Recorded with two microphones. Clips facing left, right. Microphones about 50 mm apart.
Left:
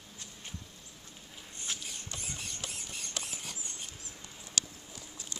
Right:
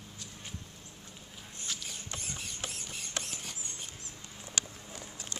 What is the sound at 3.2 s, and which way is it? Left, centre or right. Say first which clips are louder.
Mouse: even; centre.